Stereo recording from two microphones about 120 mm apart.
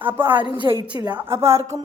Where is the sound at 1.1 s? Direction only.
20° right (ahead or behind).